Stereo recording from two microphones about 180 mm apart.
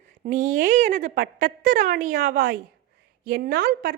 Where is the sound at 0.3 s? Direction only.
45° right (ahead or behind).